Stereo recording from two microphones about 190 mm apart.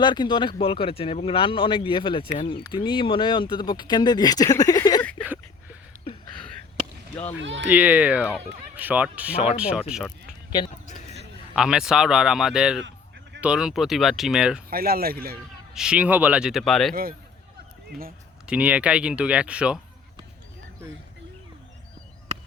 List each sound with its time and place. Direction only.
0.0 s speech: 25° left (ahead or behind)
7.3 s speech: 70° right (ahead or behind)
7.7 s speech: 10° right (ahead or behind)
11.5 s speech: 5° right (ahead or behind)
14.7 s speech: 50° right (ahead or behind)
15.7 s speech: 5° right (ahead or behind)
16.9 s speech: 50° right (ahead or behind)
18.4 s speech: 5° right (ahead or behind)